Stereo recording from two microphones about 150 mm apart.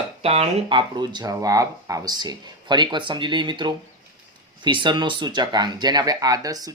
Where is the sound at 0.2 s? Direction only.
40° right (ahead or behind).